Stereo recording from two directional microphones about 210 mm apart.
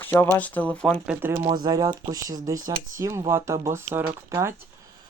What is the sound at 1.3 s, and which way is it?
Speech, 20° right (ahead or behind).